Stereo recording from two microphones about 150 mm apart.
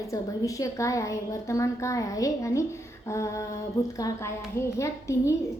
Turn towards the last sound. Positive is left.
turn(degrees=20)  # may be behind; listen again after turning